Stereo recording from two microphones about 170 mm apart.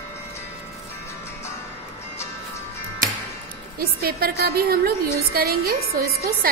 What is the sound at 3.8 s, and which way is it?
A woman's voice, 65° right (ahead or behind).